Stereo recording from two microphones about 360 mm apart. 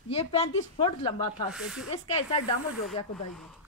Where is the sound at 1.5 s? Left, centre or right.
Centre.